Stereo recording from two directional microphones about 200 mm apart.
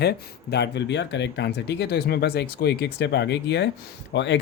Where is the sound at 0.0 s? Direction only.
55° left (ahead or behind).